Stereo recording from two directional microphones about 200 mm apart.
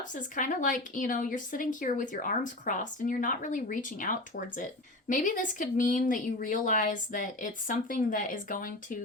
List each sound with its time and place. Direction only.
0.1 s a woman's voice: 40° left (ahead or behind)